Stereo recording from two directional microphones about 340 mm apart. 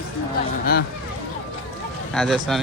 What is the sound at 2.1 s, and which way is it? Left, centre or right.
Speech, centre.